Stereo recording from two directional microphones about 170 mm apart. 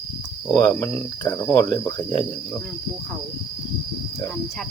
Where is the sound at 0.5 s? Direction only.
15° left (ahead or behind).